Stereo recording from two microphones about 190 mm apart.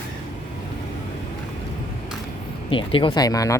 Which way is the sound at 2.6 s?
30° left (ahead or behind).